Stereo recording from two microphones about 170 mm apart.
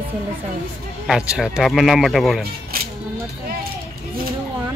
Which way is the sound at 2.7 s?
60° right (ahead or behind).